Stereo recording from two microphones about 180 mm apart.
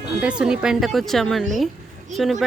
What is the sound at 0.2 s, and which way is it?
Speech, 5° right (ahead or behind).